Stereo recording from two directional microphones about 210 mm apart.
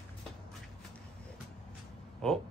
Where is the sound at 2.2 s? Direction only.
5° left (ahead or behind).